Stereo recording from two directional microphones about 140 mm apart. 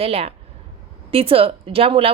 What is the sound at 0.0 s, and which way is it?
A woman's voice, 45° right (ahead or behind).